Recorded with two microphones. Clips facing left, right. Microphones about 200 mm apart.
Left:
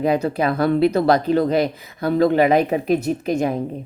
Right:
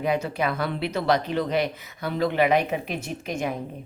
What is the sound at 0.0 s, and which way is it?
A woman's voice, 35° left (ahead or behind).